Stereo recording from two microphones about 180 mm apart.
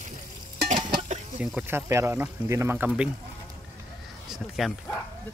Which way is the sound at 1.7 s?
15° right (ahead or behind).